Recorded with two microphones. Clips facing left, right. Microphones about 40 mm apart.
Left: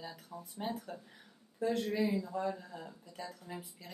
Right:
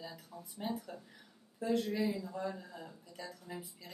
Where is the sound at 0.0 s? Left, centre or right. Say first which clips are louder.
Left 2 dB; left.